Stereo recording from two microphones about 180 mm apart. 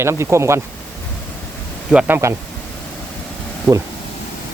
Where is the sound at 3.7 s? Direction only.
20° right (ahead or behind).